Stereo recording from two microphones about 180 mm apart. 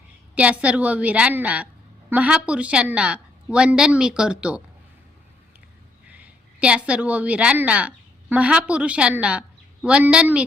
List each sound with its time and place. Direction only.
0.3 s a woman's voice: 5° right (ahead or behind)
6.1 s a woman's voice: 10° right (ahead or behind)